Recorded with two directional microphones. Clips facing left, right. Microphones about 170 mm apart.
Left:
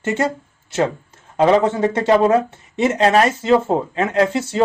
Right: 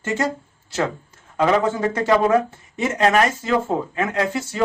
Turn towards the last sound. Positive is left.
turn(degrees=25)  # may be behind; listen again after turning